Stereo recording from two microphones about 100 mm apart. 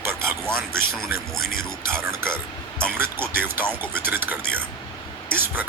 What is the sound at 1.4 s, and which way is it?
Music, 5° left (ahead or behind).